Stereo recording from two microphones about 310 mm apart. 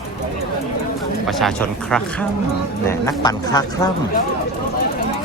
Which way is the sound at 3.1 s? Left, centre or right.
Centre.